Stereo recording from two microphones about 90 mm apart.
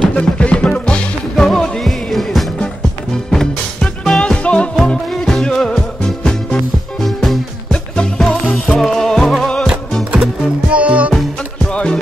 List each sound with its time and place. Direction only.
0.1 s music: 10° left (ahead or behind)
10.1 s music: 10° right (ahead or behind)
11.7 s music: 10° left (ahead or behind)